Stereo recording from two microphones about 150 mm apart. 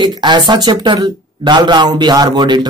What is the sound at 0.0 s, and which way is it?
Speech, 30° right (ahead or behind).